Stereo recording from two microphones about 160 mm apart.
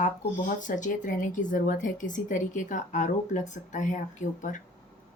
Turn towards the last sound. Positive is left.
turn(degrees=50)  # may be behind; listen again after turning